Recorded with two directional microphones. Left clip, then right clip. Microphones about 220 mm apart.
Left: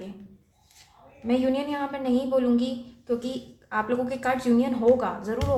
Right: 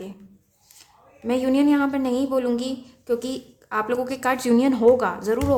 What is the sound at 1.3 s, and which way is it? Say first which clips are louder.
A woman's voice: right 5 dB; 35° right (ahead or behind).